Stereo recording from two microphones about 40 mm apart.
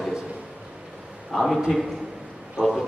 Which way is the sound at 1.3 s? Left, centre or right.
Centre.